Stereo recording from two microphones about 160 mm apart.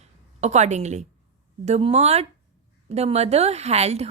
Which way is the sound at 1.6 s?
45° right (ahead or behind).